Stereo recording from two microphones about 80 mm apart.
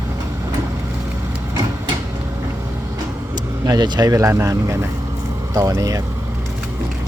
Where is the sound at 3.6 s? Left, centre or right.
Right.